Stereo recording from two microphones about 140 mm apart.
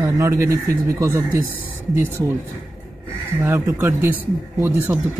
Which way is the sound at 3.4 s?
25° right (ahead or behind).